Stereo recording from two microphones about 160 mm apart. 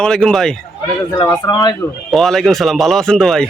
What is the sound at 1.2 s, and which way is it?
Speech, 25° left (ahead or behind).